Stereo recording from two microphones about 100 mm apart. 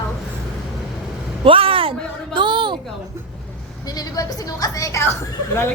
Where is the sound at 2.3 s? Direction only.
50° right (ahead or behind).